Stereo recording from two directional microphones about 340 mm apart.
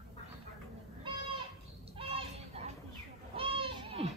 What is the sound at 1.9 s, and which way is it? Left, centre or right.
Children playing, centre.